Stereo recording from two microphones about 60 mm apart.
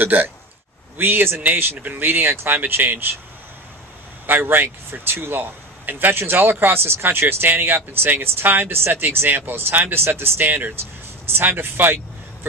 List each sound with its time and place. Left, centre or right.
0.0 s speech: right
4.3 s speech: right